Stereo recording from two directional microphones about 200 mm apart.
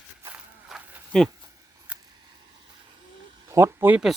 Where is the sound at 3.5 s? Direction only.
15° right (ahead or behind).